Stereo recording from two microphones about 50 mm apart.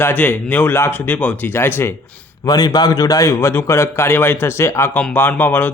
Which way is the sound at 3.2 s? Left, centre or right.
Left.